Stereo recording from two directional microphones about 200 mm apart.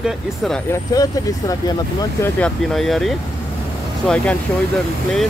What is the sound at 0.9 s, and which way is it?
Speech, 20° left (ahead or behind).